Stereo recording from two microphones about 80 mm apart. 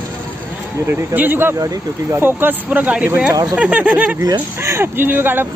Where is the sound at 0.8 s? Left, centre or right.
Right.